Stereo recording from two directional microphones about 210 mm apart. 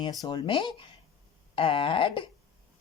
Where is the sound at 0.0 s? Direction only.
20° left (ahead or behind).